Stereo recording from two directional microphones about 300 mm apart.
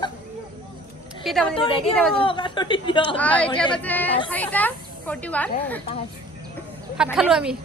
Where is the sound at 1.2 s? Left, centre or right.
Centre.